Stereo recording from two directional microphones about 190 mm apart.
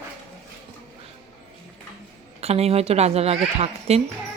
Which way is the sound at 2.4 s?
35° right (ahead or behind).